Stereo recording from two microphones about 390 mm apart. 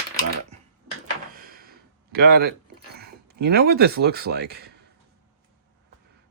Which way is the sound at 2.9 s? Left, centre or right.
Right.